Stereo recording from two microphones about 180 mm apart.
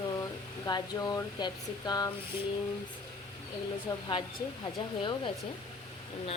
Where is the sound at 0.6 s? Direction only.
20° left (ahead or behind).